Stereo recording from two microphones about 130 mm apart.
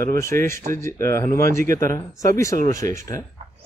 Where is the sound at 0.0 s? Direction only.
20° left (ahead or behind).